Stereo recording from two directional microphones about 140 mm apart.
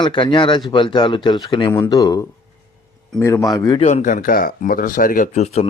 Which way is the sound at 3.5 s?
30° left (ahead or behind).